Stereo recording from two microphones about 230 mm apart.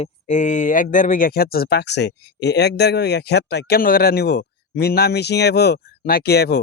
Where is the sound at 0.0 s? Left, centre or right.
Left.